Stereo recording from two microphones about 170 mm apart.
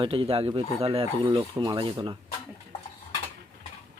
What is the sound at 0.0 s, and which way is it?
Speech, 30° right (ahead or behind).